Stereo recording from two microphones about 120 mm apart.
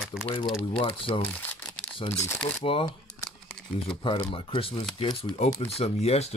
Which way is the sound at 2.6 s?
55° left (ahead or behind).